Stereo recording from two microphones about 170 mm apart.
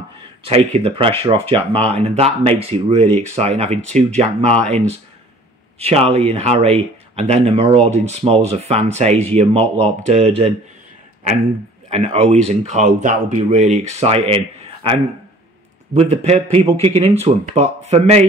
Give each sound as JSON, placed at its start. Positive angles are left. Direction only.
{"t": 0.5, "sound": "speech", "side_deg": -35}
{"t": 11.9, "sound": "speech", "side_deg": -35}